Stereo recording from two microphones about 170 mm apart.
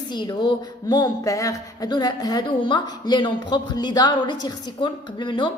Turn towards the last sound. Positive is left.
turn(degrees=30)  # may be behind; listen again after turning